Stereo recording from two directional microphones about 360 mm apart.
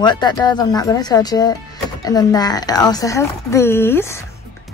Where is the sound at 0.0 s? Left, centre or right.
Centre.